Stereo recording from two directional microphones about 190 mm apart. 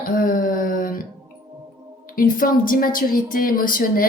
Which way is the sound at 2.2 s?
45° left (ahead or behind).